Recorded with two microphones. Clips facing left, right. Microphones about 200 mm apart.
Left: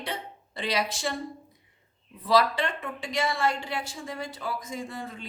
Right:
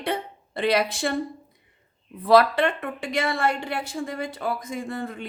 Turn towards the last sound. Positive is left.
turn(degrees=-55)  # may be behind; listen again after turning